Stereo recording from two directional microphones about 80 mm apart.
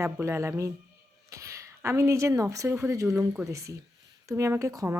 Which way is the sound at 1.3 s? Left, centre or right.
Right.